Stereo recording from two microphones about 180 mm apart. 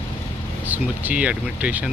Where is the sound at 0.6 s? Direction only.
10° right (ahead or behind).